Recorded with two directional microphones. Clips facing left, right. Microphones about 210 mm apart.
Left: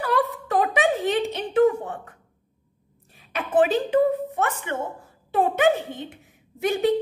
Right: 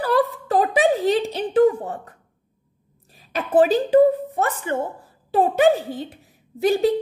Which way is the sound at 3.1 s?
35° right (ahead or behind).